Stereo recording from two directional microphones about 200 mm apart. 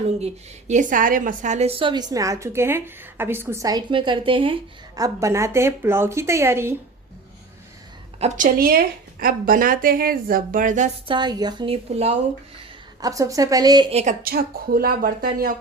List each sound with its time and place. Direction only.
0.7 s a woman's voice: 40° right (ahead or behind); by 6.7 s 10° right (ahead or behind)
8.2 s a woman's voice: 45° right (ahead or behind)
11.1 s speech: 20° right (ahead or behind)
13.0 s a woman's voice: 15° right (ahead or behind)
13.9 s a woman's voice: 35° right (ahead or behind)